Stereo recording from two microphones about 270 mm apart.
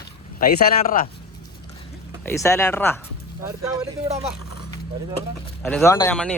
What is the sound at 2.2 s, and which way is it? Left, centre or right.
Speech, centre.